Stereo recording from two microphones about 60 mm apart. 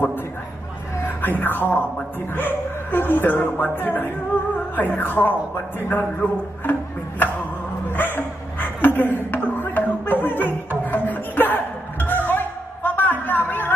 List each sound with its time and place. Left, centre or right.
1.2 s speech: left
6.6 s music: left
7.9 s chuckle: left
10.9 s music: left